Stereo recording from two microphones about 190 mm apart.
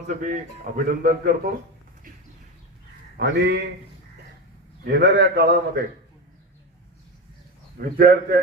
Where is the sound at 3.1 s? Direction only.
60° right (ahead or behind).